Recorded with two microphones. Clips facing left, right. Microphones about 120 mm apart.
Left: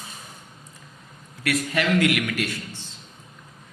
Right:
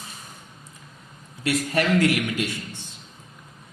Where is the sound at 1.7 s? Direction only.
40° right (ahead or behind).